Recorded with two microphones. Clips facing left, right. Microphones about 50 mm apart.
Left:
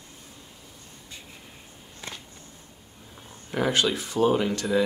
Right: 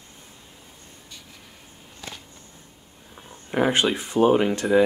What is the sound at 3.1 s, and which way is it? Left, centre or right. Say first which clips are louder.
Speech: right 5 dB; right.